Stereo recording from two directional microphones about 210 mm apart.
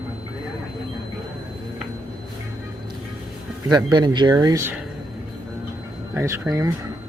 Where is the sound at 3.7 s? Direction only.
20° right (ahead or behind).